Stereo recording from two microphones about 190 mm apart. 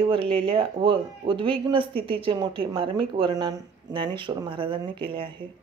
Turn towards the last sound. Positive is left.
turn(degrees=-25)  # may be behind; listen again after turning